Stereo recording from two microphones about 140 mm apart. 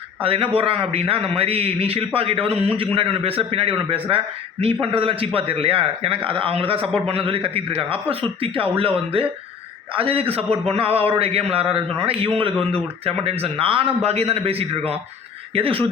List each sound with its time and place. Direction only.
0.2 s a man's voice: 40° right (ahead or behind)